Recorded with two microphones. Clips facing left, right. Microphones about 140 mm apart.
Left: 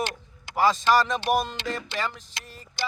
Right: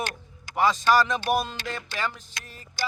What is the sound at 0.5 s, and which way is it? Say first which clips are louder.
Speech: left 1 dB; centre (ahead or behind).